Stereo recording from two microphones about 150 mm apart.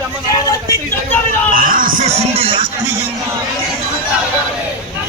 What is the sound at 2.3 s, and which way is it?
Music, 40° right (ahead or behind).